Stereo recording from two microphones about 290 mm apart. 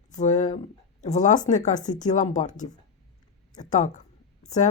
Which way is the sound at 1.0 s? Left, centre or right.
Left.